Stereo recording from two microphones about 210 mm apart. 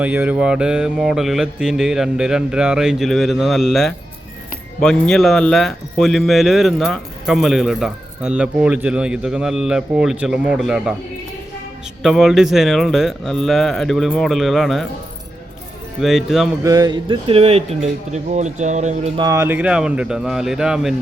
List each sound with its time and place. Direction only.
0.0 s speech: 10° right (ahead or behind)
12.0 s speech: centre (ahead or behind)
16.0 s speech: centre (ahead or behind)
16.6 s speech: 15° right (ahead or behind); by 19.2 s 30° right (ahead or behind)
19.2 s speech: 15° right (ahead or behind)